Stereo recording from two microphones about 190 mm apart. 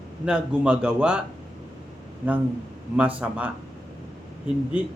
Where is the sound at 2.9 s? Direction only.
5° right (ahead or behind).